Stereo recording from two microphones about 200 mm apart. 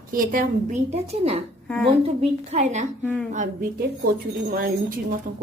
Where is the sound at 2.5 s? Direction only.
35° right (ahead or behind).